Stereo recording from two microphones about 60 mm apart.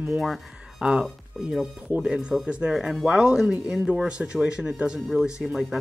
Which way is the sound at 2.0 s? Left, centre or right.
Centre.